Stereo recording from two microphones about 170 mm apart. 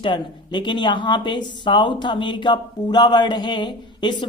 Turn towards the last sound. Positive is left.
turn(degrees=25)  # may be behind; listen again after turning